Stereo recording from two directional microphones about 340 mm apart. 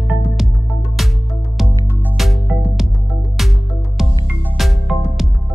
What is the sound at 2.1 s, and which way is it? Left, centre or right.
Music, centre.